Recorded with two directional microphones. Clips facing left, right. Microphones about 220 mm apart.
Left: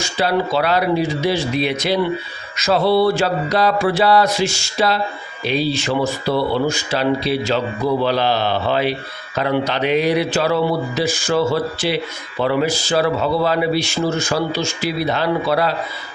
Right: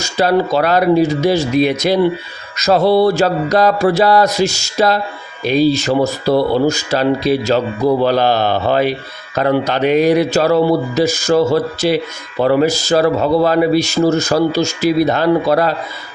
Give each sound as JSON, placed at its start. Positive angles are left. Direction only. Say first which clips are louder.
{"t": 0.0, "sound": "a man's voice", "louder": "right 5 dB", "side_deg": -45}
{"t": 2.6, "sound": "mantra", "louder": "right 4 dB", "side_deg": -40}
{"t": 8.0, "sound": "a man's voice", "louder": "right 4 dB", "side_deg": -45}